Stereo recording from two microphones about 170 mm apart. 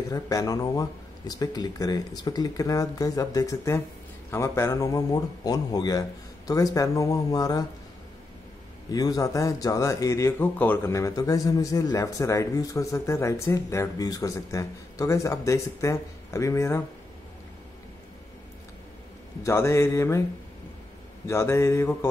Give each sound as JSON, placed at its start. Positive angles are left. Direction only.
{"t": 0.1, "sound": "speech", "side_deg": 20}
{"t": 8.9, "sound": "speech", "side_deg": 20}
{"t": 19.4, "sound": "mantra", "side_deg": 15}
{"t": 21.3, "sound": "mantra", "side_deg": 15}